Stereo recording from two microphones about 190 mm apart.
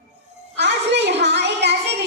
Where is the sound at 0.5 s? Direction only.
65° right (ahead or behind).